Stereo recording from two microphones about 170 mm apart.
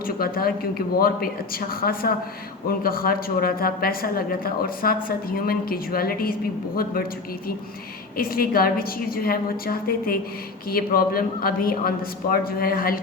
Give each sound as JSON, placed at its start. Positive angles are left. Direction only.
{"t": 0.0, "sound": "a woman's voice", "side_deg": 60}
{"t": 8.1, "sound": "a woman's voice", "side_deg": 60}